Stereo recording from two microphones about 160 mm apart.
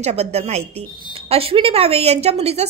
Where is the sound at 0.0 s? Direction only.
40° right (ahead or behind).